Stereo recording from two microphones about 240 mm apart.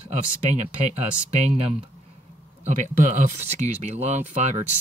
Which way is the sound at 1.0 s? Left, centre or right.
Right.